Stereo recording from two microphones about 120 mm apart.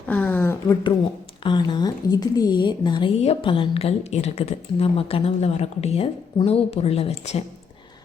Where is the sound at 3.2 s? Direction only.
55° left (ahead or behind).